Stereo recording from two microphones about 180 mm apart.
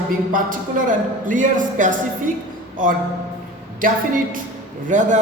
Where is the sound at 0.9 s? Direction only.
45° right (ahead or behind).